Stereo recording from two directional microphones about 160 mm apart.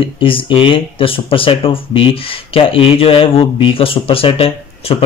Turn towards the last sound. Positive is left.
turn(degrees=40)  # may be behind; listen again after turning